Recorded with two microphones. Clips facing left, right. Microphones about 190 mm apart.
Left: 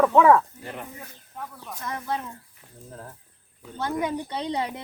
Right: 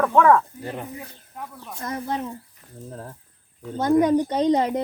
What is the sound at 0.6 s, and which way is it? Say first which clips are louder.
Speech: right 5 dB; 30° right (ahead or behind).